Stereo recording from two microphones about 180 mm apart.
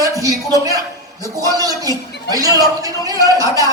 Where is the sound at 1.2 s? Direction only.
20° right (ahead or behind).